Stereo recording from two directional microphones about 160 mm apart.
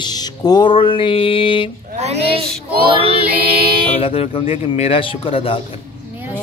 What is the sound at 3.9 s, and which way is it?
Mantra, 35° left (ahead or behind).